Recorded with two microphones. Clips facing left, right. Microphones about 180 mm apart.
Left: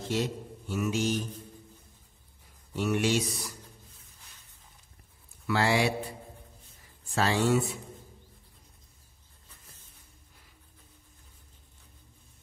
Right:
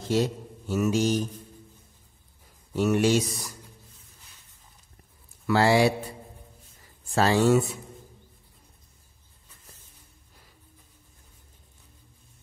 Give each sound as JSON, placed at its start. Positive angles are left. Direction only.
{"t": 0.1, "sound": "a man's voice", "side_deg": -40}
{"t": 2.7, "sound": "speech", "side_deg": -45}
{"t": 5.5, "sound": "a man's voice", "side_deg": -35}
{"t": 7.2, "sound": "a man's voice", "side_deg": -40}